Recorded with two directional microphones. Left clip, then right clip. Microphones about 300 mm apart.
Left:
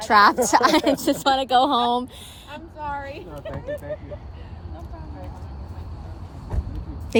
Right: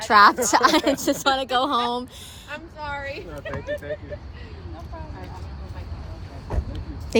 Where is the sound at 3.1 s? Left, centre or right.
Left.